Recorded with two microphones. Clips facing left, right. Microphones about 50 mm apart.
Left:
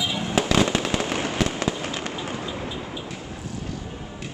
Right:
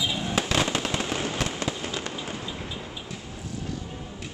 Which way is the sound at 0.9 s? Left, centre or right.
Left.